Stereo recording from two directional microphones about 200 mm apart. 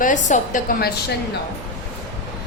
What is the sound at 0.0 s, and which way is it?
Speech, 40° left (ahead or behind).